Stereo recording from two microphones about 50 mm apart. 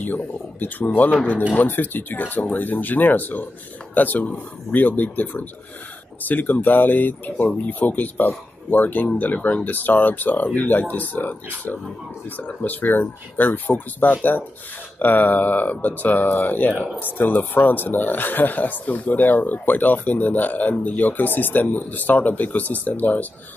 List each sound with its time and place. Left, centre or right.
0.0 s speech: left